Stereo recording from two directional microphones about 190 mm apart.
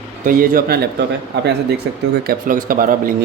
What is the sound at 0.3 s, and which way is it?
Speech, 50° right (ahead or behind).